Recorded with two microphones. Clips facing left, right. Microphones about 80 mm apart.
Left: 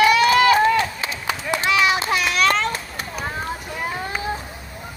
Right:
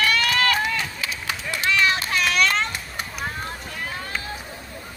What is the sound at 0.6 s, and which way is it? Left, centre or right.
Run, left.